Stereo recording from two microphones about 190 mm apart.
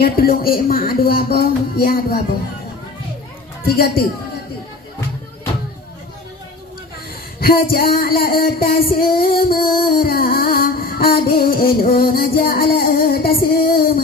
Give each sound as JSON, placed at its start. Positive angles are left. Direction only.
{"t": 0.0, "sound": "music", "side_deg": 50}
{"t": 3.6, "sound": "music", "side_deg": 55}
{"t": 7.3, "sound": "a sound", "side_deg": 55}
{"t": 7.9, "sound": "music", "side_deg": 55}